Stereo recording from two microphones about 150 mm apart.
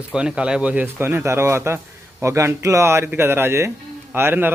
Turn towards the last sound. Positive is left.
turn(degrees=-15)  # may be behind; listen again after turning